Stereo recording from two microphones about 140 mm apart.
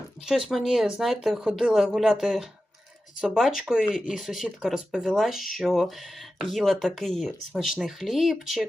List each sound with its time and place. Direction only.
0.2 s speech: centre (ahead or behind)